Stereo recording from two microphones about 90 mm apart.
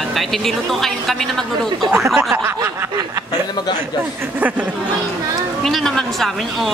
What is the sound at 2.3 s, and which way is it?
Speech, 25° right (ahead or behind).